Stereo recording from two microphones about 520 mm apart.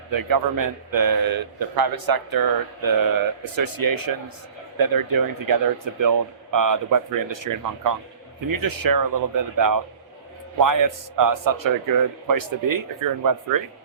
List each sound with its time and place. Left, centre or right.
0.1 s a man's voice: right